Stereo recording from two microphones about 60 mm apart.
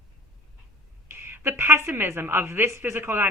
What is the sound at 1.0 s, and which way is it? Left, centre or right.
A woman's voice, right.